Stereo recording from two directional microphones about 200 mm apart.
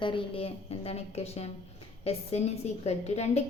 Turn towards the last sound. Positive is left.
turn(degrees=35)  # may be behind; listen again after turning